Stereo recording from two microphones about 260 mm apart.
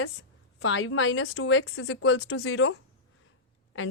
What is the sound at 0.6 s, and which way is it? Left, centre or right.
A woman's voice, left.